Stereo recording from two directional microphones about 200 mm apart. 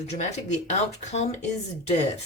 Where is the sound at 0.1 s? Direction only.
35° left (ahead or behind).